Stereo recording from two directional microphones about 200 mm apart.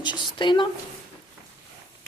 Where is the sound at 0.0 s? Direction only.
25° left (ahead or behind).